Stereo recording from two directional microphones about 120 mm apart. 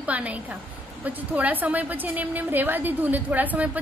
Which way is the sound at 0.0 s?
10° right (ahead or behind).